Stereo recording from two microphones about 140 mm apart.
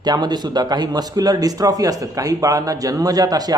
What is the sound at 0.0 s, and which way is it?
Speech, 30° right (ahead or behind).